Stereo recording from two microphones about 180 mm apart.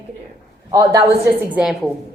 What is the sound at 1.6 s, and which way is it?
Speech, centre (ahead or behind).